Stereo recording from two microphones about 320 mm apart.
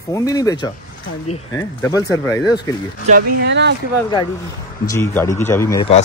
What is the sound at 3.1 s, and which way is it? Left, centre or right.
Speech, right.